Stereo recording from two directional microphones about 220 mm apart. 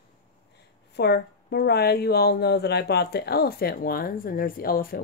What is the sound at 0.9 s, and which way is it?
Speech, 50° left (ahead or behind).